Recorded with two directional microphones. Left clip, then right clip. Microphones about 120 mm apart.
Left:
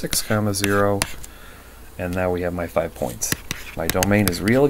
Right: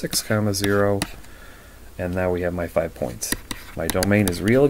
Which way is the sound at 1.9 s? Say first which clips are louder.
Even; 15° right (ahead or behind).